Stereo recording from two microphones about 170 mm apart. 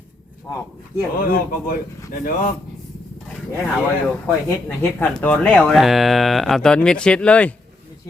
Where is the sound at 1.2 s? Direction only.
55° left (ahead or behind).